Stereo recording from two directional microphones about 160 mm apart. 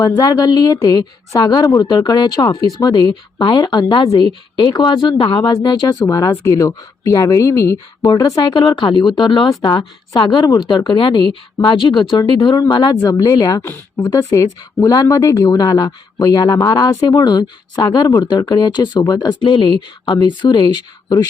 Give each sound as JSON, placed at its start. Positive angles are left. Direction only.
{"t": 0.2, "sound": "speech", "side_deg": 25}